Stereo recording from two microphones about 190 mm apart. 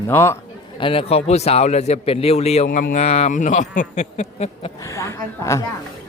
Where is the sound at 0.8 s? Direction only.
30° left (ahead or behind).